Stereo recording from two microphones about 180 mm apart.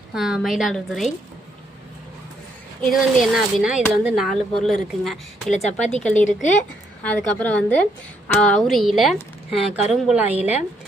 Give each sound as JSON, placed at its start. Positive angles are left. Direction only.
{"t": 0.1, "sound": "speech", "side_deg": -5}
{"t": 2.8, "sound": "speech", "side_deg": 0}
{"t": 5.5, "sound": "speech", "side_deg": 40}
{"t": 7.0, "sound": "a woman's voice", "side_deg": 10}